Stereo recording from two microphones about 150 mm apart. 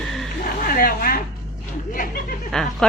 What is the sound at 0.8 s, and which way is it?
Speech, 75° left (ahead or behind).